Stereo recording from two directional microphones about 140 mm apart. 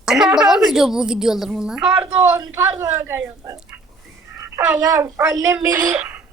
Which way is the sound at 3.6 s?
10° right (ahead or behind).